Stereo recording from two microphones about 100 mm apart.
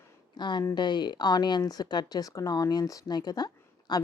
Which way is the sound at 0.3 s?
50° left (ahead or behind).